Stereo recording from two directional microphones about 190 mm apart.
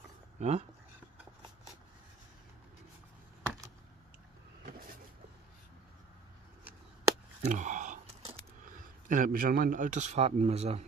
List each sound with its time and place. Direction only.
0.4 s speech: 35° right (ahead or behind)
7.4 s a sound: 40° right (ahead or behind)
8.6 s a man's voice: 45° right (ahead or behind)